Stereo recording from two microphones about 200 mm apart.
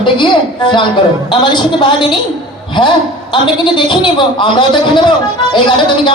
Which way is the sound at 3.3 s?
25° left (ahead or behind).